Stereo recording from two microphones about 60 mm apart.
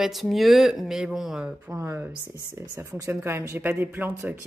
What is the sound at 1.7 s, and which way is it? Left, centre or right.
Speech, right.